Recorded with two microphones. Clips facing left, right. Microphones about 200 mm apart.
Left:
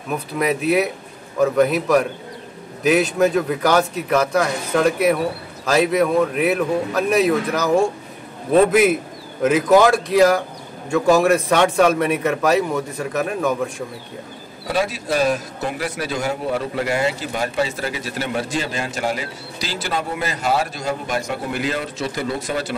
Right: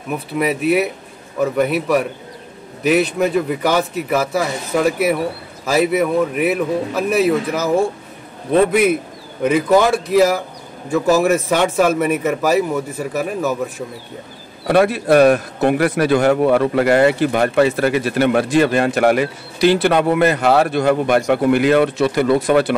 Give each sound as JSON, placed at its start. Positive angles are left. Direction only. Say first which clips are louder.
{"t": 0.3, "sound": "a man's voice", "louder": "right 2 dB", "side_deg": 0}
{"t": 14.7, "sound": "speech", "louder": "right 8 dB", "side_deg": -60}